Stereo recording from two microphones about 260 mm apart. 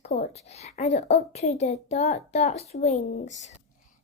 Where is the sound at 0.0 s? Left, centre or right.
Left.